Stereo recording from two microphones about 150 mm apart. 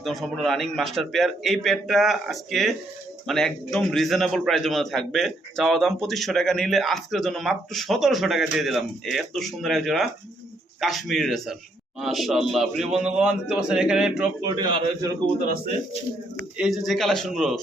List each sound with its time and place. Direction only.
0.0 s a man's voice: centre (ahead or behind)
14.4 s a man's voice: 25° right (ahead or behind)
16.6 s a man's voice: centre (ahead or behind)